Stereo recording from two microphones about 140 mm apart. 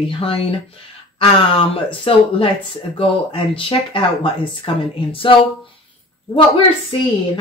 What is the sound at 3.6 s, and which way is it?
A woman's voice, 40° left (ahead or behind).